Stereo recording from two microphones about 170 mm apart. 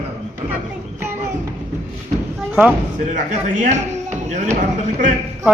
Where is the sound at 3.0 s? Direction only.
45° right (ahead or behind).